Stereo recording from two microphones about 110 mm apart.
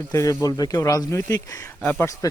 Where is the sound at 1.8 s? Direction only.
15° left (ahead or behind).